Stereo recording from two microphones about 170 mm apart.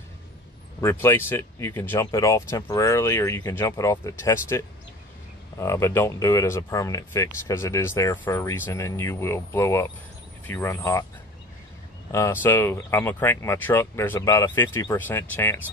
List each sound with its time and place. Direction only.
0.7 s speech: 15° left (ahead or behind)
12.1 s speech: 15° left (ahead or behind)